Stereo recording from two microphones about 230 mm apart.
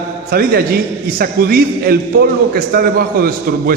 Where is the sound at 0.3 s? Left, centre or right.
Right.